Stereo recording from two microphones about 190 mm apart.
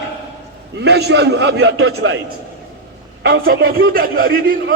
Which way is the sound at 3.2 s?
55° right (ahead or behind).